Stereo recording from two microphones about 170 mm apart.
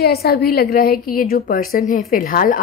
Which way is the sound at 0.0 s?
65° left (ahead or behind).